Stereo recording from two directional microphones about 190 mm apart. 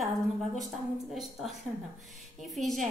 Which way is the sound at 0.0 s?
Centre (ahead or behind).